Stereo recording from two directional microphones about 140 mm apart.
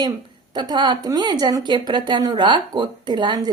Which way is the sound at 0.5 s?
30° right (ahead or behind).